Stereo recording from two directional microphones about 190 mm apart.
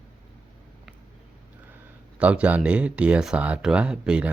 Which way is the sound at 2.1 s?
5° right (ahead or behind).